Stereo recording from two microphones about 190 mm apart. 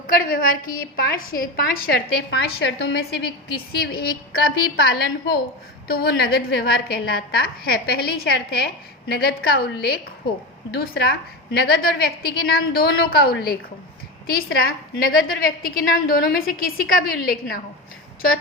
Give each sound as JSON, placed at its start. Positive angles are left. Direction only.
{"t": 0.1, "sound": "a woman's voice", "side_deg": 50}
{"t": 10.8, "sound": "a woman's voice", "side_deg": 55}